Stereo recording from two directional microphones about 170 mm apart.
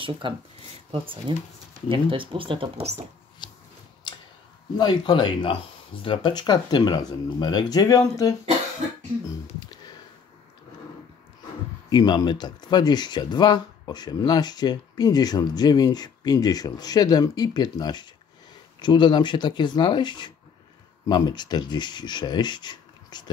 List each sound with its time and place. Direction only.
0.2 s speech: 30° right (ahead or behind)
3.4 s a sound: 25° left (ahead or behind)
4.7 s speech: 25° left (ahead or behind)
11.9 s speech: 25° left (ahead or behind)